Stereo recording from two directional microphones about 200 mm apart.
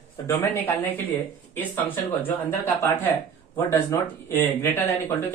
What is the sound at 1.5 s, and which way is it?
Speech, 10° left (ahead or behind).